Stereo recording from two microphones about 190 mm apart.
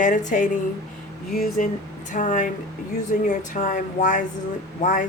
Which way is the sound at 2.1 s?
40° left (ahead or behind).